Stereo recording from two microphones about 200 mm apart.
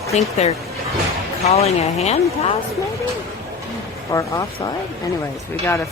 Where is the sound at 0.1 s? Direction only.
35° left (ahead or behind).